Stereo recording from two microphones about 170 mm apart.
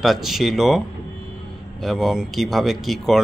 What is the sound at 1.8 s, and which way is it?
Speech, centre (ahead or behind).